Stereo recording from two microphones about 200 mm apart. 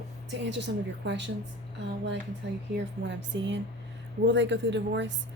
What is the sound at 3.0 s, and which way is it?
Speech, 65° right (ahead or behind).